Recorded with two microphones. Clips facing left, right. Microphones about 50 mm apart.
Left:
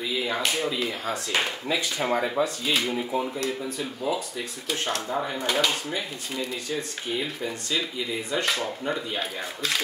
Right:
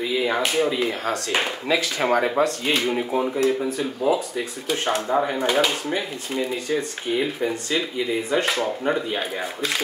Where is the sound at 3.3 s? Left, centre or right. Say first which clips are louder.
Right 8 dB; centre.